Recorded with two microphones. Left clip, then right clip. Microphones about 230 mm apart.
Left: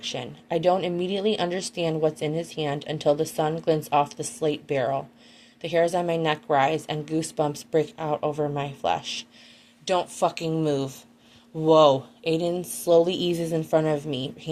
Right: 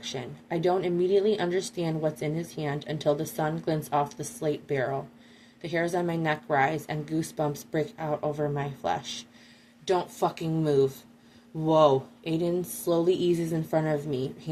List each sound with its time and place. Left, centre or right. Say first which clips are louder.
0.1 s a woman's voice: left 5 dB; left